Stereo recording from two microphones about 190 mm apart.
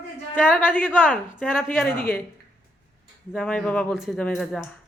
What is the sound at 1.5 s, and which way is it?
Speech, centre (ahead or behind).